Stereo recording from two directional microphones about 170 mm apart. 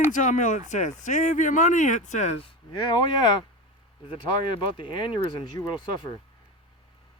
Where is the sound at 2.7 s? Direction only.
25° left (ahead or behind).